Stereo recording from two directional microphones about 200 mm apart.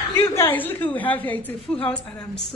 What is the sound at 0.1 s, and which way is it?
A woman's voice, 10° left (ahead or behind).